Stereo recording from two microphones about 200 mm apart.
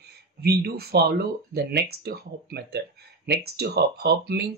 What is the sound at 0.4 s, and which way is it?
Speech, 55° right (ahead or behind).